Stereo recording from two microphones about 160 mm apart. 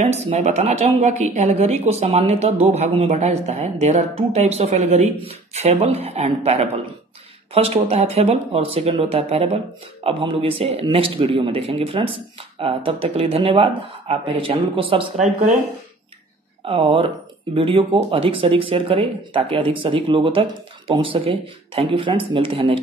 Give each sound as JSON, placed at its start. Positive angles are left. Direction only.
{"t": 0.0, "sound": "speech", "side_deg": -45}
{"t": 16.6, "sound": "speech", "side_deg": -35}